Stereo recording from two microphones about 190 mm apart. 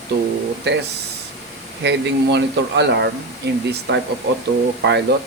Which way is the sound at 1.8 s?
65° right (ahead or behind).